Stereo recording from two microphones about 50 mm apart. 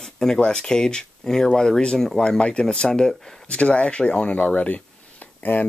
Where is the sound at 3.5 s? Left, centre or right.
Left.